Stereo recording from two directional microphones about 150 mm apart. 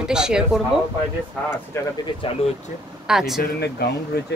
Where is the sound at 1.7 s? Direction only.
15° left (ahead or behind).